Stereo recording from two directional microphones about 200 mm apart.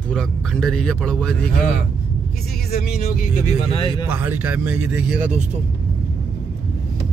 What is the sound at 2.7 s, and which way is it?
Speech, 50° left (ahead or behind).